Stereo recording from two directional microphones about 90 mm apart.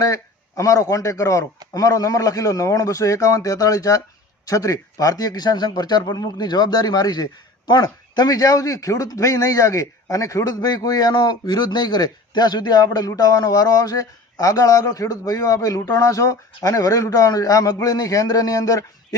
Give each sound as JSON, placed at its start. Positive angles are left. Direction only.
{"t": 0.0, "sound": "a man's voice", "side_deg": 40}